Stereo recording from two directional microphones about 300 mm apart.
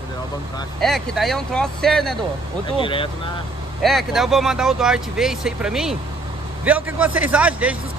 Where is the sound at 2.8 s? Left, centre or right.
Centre.